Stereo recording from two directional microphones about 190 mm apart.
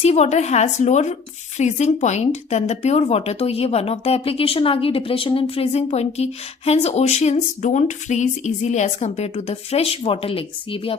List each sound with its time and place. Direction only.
0.0 s speech: 35° left (ahead or behind)